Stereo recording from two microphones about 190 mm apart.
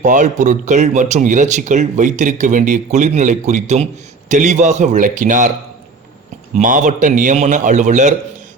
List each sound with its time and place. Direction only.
0.0 s speech: 40° right (ahead or behind)
6.6 s speech: 45° right (ahead or behind)